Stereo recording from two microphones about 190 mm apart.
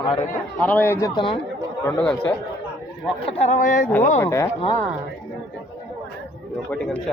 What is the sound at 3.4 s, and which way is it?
Speech, 40° left (ahead or behind).